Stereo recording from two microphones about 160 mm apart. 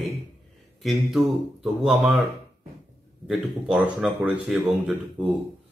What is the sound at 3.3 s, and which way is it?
Speech, 5° right (ahead or behind).